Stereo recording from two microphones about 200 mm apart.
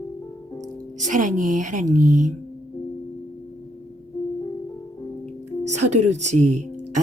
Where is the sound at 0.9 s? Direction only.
40° right (ahead or behind).